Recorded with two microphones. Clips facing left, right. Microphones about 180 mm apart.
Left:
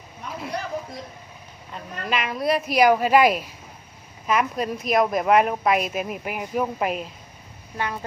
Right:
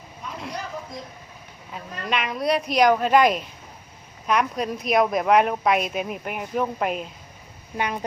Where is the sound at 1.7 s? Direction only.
Centre (ahead or behind).